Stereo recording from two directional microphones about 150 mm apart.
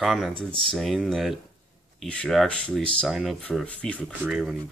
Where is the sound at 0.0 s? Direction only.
Centre (ahead or behind).